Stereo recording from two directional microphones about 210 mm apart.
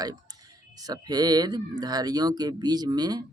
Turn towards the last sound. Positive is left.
turn(degrees=-20)  # may be behind; listen again after turning